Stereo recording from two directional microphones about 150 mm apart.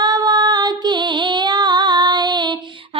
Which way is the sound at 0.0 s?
25° right (ahead or behind).